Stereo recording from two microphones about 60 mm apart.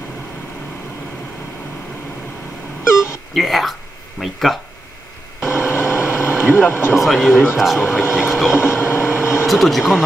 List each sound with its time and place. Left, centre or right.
2.8 s a sound: left
3.3 s speech: centre
5.4 s vehicle: left
6.2 s speech: left
7.0 s speech: centre
8.5 s vehicle: left
9.5 s speech: centre